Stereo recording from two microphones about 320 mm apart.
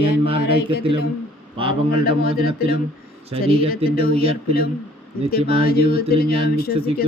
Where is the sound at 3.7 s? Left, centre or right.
Left.